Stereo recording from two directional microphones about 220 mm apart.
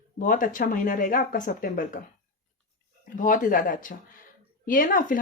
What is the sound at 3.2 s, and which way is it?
Speech, 35° left (ahead or behind).